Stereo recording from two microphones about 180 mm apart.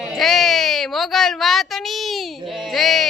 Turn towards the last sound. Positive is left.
turn(degrees=0)  # may be behind; listen again after turning